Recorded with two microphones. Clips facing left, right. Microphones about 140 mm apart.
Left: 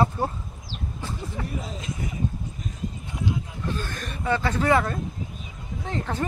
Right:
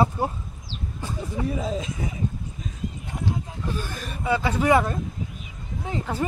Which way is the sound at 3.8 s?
10° right (ahead or behind).